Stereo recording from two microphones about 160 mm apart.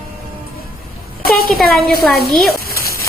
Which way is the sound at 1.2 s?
70° left (ahead or behind).